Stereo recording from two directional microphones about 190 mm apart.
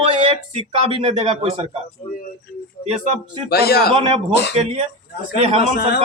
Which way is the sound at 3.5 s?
55° left (ahead or behind).